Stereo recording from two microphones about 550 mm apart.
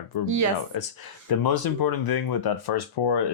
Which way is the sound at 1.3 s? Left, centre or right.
Left.